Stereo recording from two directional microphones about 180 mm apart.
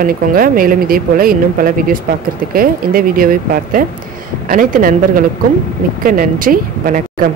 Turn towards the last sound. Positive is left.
turn(degrees=-50)  # may be behind; listen again after turning